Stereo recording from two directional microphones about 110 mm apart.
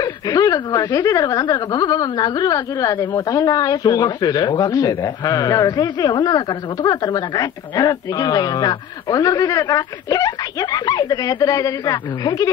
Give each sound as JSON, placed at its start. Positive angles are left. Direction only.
{"t": 0.0, "sound": "speech", "side_deg": 35}